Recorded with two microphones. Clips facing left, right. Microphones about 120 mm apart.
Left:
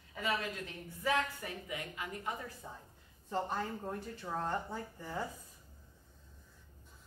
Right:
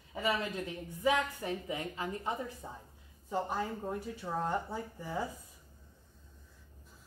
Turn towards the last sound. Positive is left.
turn(degrees=-10)  # may be behind; listen again after turning